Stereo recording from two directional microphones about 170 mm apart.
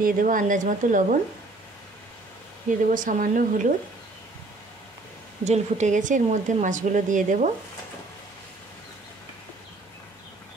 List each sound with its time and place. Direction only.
0.0 s speech: 50° right (ahead or behind)
2.9 s speech: 50° right (ahead or behind)
5.4 s speech: 40° right (ahead or behind)